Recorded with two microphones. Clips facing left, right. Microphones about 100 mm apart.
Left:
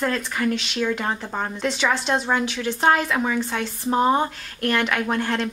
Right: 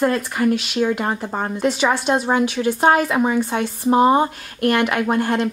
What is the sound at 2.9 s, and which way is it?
Speech, 15° right (ahead or behind).